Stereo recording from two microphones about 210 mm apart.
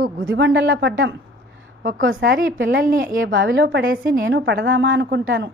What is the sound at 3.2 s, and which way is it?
A woman's voice, 55° right (ahead or behind).